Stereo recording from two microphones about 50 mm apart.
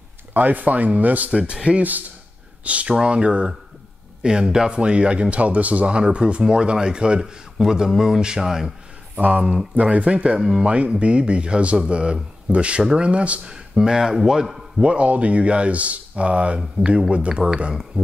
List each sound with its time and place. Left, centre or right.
0.3 s speech: right
1.3 s a man's voice: centre
9.1 s speech: right
10.4 s a man's voice: centre
10.7 s speech: right
13.5 s a man's voice: centre
14.8 s speech: right
17.9 s a sound: right